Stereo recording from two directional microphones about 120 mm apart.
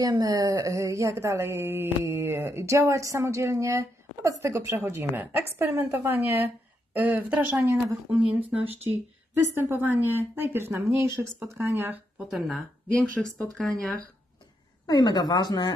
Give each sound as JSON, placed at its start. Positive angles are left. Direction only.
{"t": 0.0, "sound": "a woman's voice", "side_deg": -30}
{"t": 12.2, "sound": "speech", "side_deg": 0}
{"t": 14.9, "sound": "a woman's voice", "side_deg": 35}